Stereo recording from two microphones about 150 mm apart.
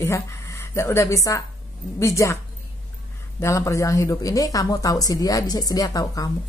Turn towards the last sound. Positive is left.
turn(degrees=25)  # may be behind; listen again after turning